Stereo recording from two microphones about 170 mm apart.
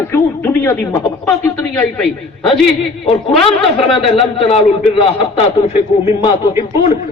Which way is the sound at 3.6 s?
35° left (ahead or behind).